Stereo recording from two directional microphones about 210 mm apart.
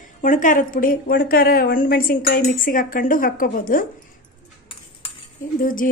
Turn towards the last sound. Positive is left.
turn(degrees=40)  # may be behind; listen again after turning